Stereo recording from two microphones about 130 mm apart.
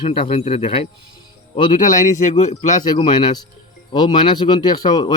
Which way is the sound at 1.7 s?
80° left.